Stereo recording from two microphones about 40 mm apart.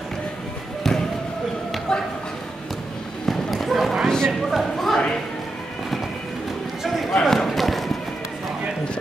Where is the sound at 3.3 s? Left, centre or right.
Centre.